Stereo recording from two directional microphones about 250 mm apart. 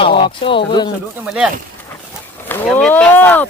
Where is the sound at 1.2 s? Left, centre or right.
Centre.